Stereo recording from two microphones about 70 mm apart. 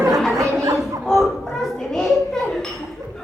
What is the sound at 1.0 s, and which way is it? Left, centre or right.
A child's voice, centre.